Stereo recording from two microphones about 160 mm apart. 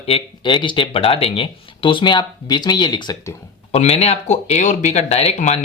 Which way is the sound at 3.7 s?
40° left (ahead or behind).